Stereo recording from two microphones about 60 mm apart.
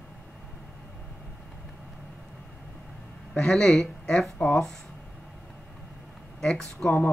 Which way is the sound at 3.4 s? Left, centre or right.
Centre.